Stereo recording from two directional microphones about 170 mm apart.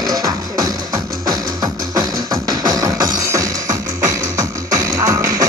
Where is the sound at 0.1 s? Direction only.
20° right (ahead or behind).